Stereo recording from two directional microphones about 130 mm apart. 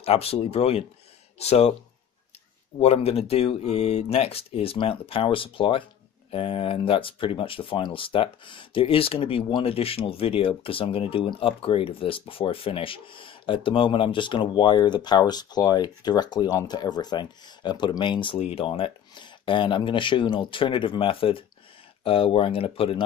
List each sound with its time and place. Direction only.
0.0 s speech: 50° left (ahead or behind)
2.8 s speech: 50° left (ahead or behind)